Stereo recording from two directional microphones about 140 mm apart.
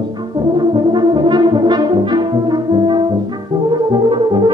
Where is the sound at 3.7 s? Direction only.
35° right (ahead or behind).